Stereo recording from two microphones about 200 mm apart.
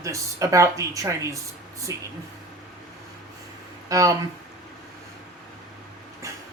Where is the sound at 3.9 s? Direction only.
15° right (ahead or behind).